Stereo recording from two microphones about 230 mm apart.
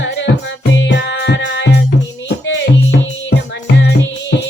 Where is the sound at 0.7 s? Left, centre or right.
Left.